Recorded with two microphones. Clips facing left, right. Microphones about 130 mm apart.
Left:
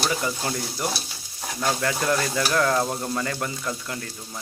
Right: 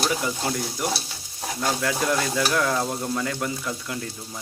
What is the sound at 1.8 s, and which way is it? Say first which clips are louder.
Stir: even; 5° right (ahead or behind).